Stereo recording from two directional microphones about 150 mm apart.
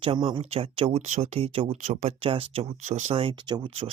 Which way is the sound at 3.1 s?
35° right (ahead or behind).